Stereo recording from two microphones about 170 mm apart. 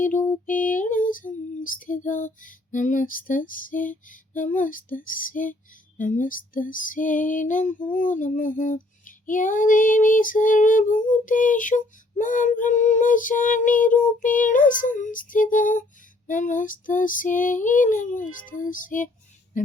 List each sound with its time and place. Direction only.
0.0 s music: 50° left (ahead or behind)
0.4 s female singing: 50° left (ahead or behind)